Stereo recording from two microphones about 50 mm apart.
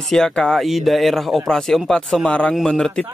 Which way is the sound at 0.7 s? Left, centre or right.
Centre.